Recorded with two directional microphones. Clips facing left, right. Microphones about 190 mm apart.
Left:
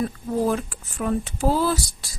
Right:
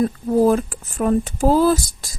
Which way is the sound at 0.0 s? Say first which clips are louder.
Right 7 dB; 40° right (ahead or behind).